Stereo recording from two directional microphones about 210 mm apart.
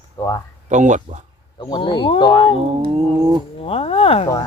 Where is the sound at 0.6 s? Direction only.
35° right (ahead or behind).